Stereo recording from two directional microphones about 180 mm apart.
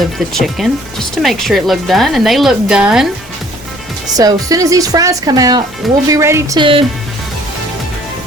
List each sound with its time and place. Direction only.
0.3 s speech: centre (ahead or behind)
4.1 s speech: 20° right (ahead or behind)
6.6 s speech: 30° right (ahead or behind)